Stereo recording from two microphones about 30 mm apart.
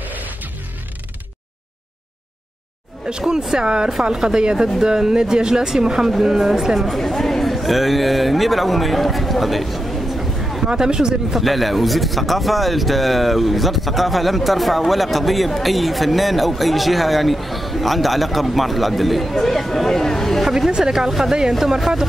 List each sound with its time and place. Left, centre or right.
0.0 s music: right
3.1 s speech: right
4.1 s speech: centre
4.4 s speech: right; by 6.9 s centre
6.9 s a man's voice: centre
10.7 s speech: right
11.3 s speech: centre
20.4 s speech: centre
20.7 s speech: right